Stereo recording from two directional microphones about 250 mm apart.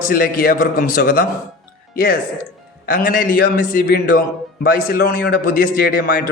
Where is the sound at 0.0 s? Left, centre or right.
Left.